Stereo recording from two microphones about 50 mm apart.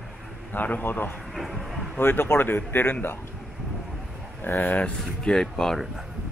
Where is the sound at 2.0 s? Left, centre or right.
Left.